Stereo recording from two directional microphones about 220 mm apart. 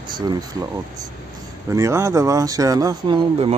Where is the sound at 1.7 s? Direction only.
15° right (ahead or behind).